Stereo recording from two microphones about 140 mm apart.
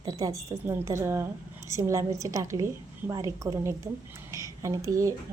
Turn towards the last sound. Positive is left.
turn(degrees=-25)  # may be behind; listen again after turning